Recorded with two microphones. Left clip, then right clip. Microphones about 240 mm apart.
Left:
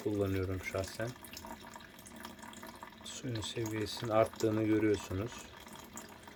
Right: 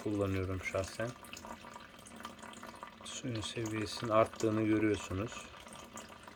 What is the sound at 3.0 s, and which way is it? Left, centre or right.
A man's voice, centre.